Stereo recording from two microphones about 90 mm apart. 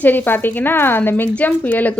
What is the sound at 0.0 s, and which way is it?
Speech, 20° left (ahead or behind).